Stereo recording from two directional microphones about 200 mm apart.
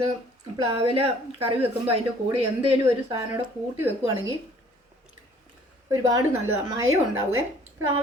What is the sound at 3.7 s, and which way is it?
Speech, 15° right (ahead or behind).